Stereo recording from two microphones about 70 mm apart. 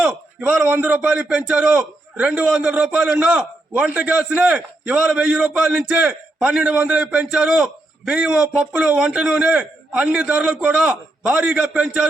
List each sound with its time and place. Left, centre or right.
0.0 s a man's voice: centre
5.9 s a man's voice: right